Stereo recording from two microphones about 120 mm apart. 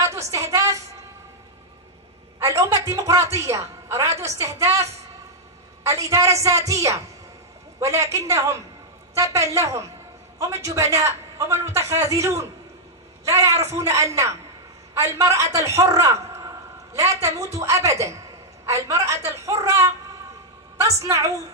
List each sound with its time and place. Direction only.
0.0 s a sound: 25° right (ahead or behind)
2.4 s a woman's voice: 25° right (ahead or behind)
5.9 s a woman's voice: 25° right (ahead or behind)
8.0 s a woman's voice: 25° right (ahead or behind)
15.9 s a sound: 25° right (ahead or behind)
17.6 s a woman's voice: 25° right (ahead or behind)